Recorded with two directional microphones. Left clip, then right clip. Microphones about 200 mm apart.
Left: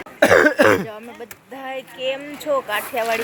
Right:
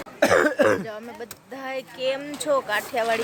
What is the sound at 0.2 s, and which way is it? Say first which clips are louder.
Cough: left 5 dB; 55° left (ahead or behind).